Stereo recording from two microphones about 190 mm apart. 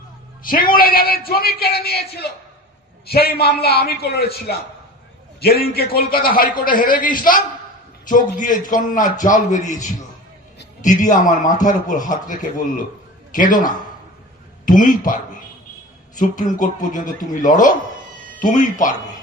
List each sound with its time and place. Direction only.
0.4 s a man's voice: 50° left (ahead or behind)
16.2 s a man's voice: 45° left (ahead or behind)